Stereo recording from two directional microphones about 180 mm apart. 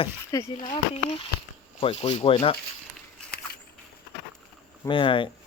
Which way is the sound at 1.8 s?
35° left (ahead or behind).